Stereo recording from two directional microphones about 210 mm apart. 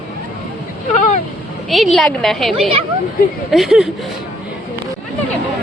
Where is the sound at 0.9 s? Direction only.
35° left (ahead or behind).